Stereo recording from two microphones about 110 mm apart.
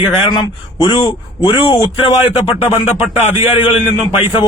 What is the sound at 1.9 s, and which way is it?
Speech, 55° left (ahead or behind).